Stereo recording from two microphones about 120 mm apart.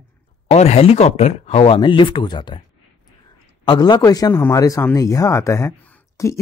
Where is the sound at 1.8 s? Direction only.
45° left (ahead or behind).